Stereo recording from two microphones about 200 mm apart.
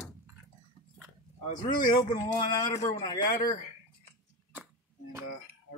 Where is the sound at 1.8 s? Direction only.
20° left (ahead or behind).